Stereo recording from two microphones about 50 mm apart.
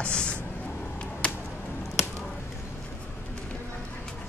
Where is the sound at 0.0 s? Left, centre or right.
Left.